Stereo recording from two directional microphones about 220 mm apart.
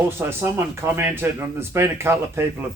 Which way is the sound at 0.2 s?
10° right (ahead or behind).